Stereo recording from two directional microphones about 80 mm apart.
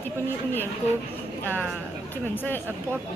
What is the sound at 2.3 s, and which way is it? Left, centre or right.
Speech, left.